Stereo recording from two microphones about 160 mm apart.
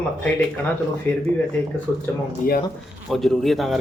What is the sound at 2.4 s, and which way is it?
Speech, 55° left (ahead or behind).